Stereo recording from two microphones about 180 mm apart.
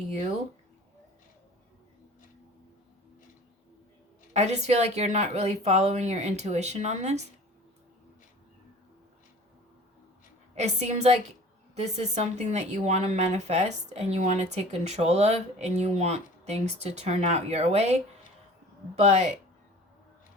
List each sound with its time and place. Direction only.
4.4 s speech: 40° right (ahead or behind)
10.5 s speech: 40° right (ahead or behind)